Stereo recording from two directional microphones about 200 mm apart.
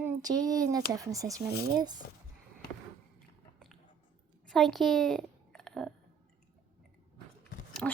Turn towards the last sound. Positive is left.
turn(degrees=5)  # may be behind; listen again after turning